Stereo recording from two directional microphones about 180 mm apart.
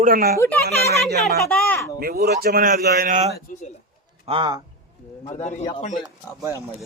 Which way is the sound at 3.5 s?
40° left (ahead or behind).